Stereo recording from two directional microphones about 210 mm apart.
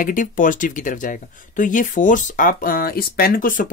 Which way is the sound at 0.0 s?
40° left (ahead or behind).